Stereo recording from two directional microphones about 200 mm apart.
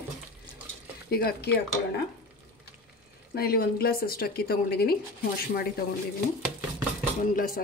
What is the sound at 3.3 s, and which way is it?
Speech, 50° left (ahead or behind).